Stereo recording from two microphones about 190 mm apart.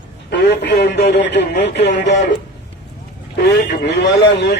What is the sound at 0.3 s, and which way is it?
Speech, 65° left (ahead or behind).